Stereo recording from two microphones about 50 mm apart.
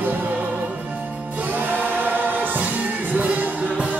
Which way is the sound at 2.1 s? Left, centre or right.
Right.